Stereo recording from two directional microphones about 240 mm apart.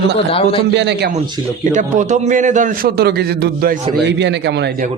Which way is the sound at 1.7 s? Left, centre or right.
Right.